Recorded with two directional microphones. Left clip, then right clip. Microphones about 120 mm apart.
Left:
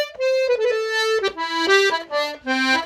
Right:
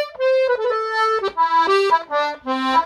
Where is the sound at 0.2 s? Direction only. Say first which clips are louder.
Right 2 dB; 25° left (ahead or behind).